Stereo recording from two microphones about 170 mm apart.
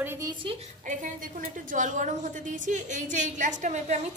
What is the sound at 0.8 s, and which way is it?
A woman's voice, 50° right (ahead or behind).